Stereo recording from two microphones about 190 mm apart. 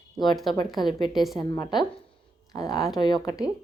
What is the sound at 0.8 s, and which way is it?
Speech, centre (ahead or behind).